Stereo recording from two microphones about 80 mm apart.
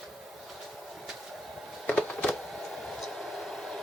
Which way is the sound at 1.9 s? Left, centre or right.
Centre.